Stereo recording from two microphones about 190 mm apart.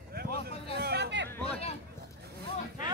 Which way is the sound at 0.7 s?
60° right (ahead or behind).